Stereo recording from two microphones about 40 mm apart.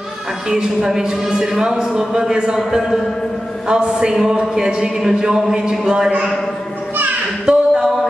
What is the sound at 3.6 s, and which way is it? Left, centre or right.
A man's voice, right.